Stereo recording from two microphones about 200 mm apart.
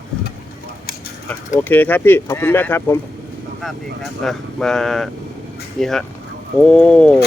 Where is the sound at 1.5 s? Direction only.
10° left (ahead or behind).